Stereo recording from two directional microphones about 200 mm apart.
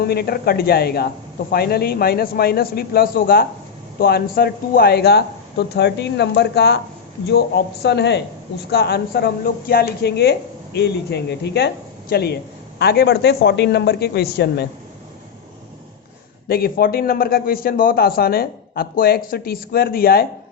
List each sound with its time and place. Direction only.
0.0 s a man's voice: 50° left (ahead or behind)
16.5 s a man's voice: 50° left (ahead or behind)